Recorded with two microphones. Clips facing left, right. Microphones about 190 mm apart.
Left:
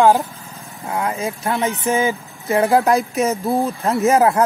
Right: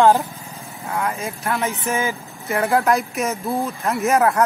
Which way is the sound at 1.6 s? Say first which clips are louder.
Left 6 dB; 15° left (ahead or behind).